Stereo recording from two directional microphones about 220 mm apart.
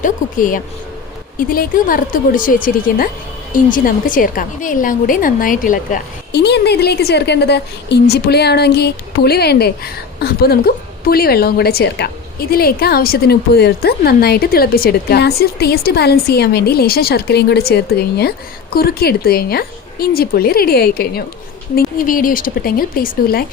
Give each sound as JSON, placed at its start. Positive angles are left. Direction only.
{"t": 0.0, "sound": "a woman's voice", "side_deg": 35}